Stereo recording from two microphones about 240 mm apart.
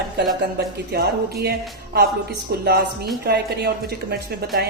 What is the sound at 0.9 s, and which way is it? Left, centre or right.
Speech, right.